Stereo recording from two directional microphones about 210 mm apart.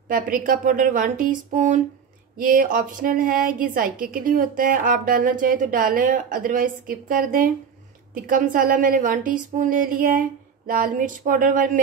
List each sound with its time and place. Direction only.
0.1 s a woman's voice: 40° right (ahead or behind)